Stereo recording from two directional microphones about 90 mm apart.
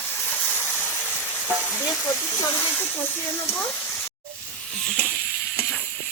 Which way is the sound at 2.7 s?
20° left (ahead or behind).